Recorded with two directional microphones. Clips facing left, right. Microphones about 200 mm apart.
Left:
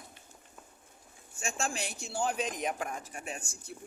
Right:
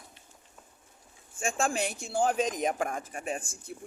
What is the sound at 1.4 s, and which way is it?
A man's voice, 50° right (ahead or behind).